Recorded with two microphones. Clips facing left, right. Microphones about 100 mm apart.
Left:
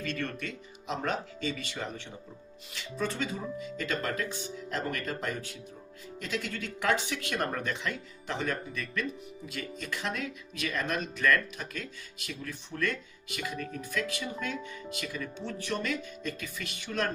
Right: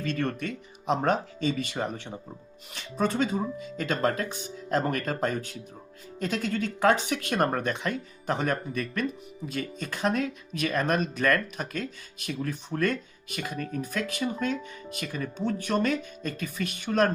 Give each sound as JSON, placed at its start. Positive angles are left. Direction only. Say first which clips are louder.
{"t": 0.2, "sound": "speech", "louder": "right 6 dB", "side_deg": -45}